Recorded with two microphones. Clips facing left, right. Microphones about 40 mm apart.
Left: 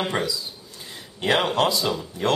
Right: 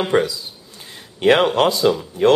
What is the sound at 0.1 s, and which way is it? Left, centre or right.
Speech, right.